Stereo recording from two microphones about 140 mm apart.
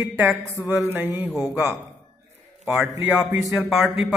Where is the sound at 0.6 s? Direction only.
25° left (ahead or behind).